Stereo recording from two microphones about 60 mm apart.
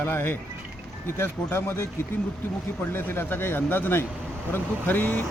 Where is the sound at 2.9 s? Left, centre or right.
Left.